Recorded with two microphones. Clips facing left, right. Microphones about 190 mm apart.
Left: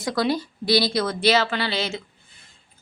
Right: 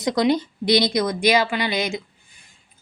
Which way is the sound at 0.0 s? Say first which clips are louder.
Right 4 dB; 20° right (ahead or behind).